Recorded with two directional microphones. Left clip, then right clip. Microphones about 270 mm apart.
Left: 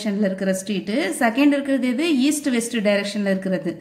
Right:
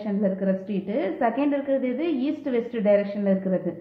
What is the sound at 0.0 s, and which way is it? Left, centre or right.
A woman's voice, left.